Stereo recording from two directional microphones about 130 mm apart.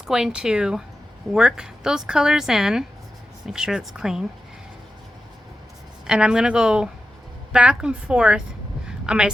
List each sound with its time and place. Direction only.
0.0 s a woman's voice: 5° right (ahead or behind)
6.1 s speech: 5° right (ahead or behind)
8.9 s a sound: 5° right (ahead or behind)